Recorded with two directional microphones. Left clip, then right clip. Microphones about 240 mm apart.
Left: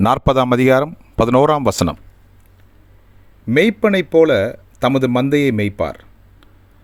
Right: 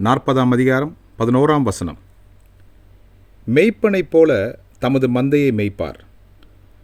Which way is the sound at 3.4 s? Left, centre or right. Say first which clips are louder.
Left 1 dB; centre.